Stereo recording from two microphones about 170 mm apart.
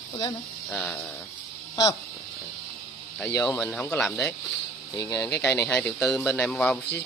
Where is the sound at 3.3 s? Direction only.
5° left (ahead or behind).